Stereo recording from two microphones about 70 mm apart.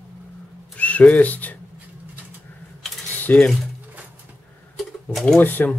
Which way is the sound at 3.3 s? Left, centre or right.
Left.